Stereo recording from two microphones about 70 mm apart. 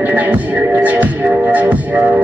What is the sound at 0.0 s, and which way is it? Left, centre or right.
Music, right.